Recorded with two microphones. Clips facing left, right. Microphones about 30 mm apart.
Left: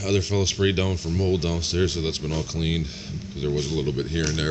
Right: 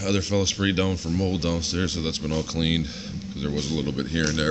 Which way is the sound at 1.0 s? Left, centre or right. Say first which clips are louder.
Right 1 dB; right.